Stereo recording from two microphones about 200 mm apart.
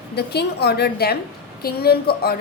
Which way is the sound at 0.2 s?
55° left (ahead or behind).